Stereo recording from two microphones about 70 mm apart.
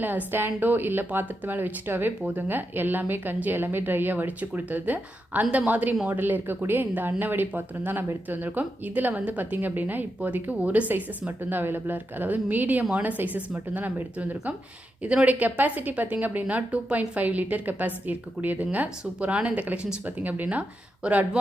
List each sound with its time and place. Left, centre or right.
0.0 s speech: right
20.1 s speech: right